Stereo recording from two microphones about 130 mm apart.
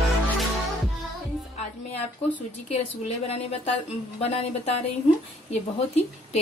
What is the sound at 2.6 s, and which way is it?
A woman's voice, 55° left (ahead or behind).